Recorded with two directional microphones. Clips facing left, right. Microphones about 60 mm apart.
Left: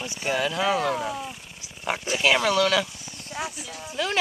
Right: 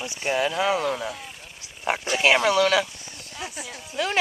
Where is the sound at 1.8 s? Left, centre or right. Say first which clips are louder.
Right 3 dB; centre.